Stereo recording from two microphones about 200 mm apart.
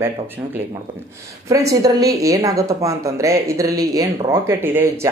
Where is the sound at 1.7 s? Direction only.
15° right (ahead or behind).